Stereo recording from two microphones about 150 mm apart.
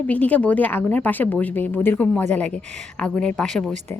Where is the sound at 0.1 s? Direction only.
10° left (ahead or behind).